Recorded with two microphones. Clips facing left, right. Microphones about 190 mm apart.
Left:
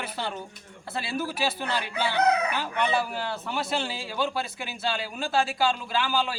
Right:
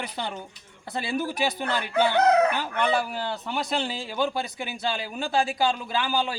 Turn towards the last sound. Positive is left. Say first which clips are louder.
# right 1 dB
turn(degrees=-15)  # may be behind; listen again after turning